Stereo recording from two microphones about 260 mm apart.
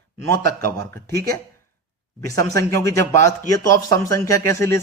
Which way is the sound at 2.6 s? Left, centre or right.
Centre.